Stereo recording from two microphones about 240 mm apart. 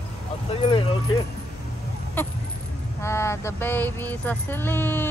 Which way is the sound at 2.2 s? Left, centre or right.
Centre.